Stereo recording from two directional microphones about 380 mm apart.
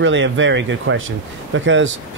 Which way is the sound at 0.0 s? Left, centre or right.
Right.